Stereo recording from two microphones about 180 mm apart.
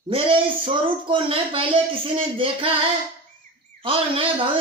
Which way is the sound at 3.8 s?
30° right (ahead or behind).